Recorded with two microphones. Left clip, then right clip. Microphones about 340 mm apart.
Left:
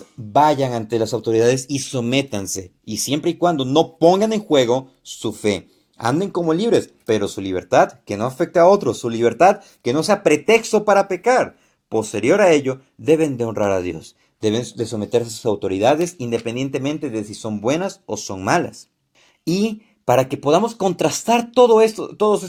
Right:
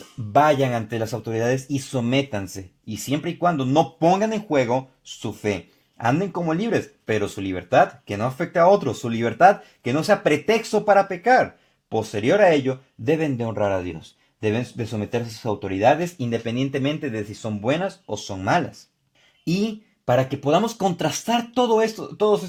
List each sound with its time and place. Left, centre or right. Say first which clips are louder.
0.3 s speech: left 2 dB; right